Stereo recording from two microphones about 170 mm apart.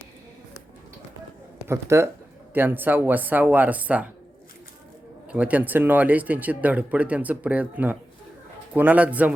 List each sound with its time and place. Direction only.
1.6 s speech: 15° right (ahead or behind)
5.3 s speech: 10° right (ahead or behind)